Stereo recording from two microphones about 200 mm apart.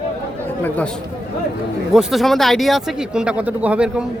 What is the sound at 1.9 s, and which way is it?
Speech, centre (ahead or behind).